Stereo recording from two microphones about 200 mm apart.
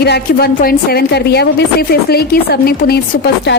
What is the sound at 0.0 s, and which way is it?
A woman's voice, 55° left (ahead or behind).